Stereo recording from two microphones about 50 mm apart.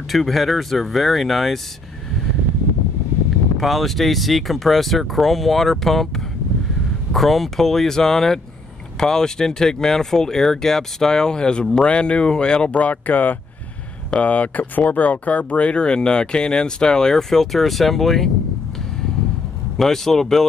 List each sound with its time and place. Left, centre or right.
0.1 s speech: centre
3.5 s speech: centre
7.1 s speech: centre
19.8 s speech: centre